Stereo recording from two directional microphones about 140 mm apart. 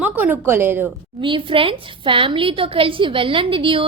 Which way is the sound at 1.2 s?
40° right (ahead or behind).